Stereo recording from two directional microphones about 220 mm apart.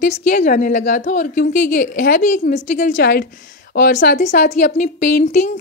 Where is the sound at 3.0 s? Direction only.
50° left (ahead or behind).